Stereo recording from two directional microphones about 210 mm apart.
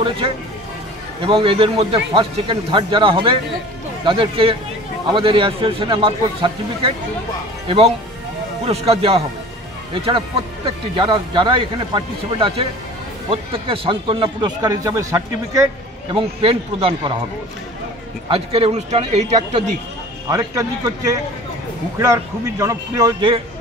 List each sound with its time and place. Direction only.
1.2 s a man's voice: 25° right (ahead or behind)
18.3 s speech: 25° right (ahead or behind)
20.2 s a man's voice: 15° right (ahead or behind)